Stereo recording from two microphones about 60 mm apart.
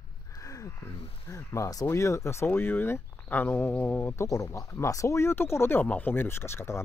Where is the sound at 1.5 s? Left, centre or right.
Left.